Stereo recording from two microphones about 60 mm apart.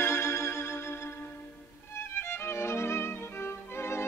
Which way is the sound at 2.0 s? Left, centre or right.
Left.